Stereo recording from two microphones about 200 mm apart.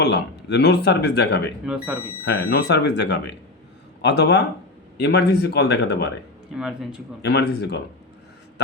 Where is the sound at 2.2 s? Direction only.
55° left (ahead or behind).